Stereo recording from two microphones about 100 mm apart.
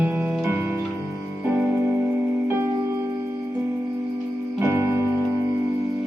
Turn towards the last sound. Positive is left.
turn(degrees=-25)  # may be behind; listen again after turning